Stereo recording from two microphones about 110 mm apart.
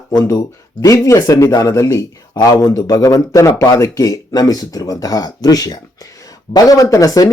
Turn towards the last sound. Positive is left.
turn(degrees=30)  # may be behind; listen again after turning